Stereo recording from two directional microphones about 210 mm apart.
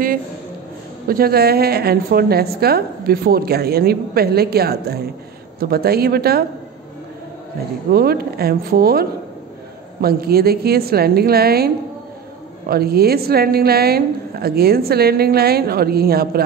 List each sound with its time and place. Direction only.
1.0 s a woman's voice: 45° right (ahead or behind)
7.9 s a woman's voice: 45° right (ahead or behind)
10.0 s a woman's voice: 45° right (ahead or behind)